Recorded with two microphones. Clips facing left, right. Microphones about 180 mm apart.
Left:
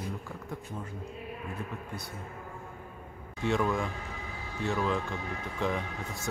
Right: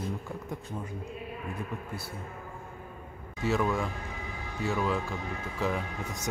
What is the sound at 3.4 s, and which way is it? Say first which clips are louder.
Speech: even; centre (ahead or behind).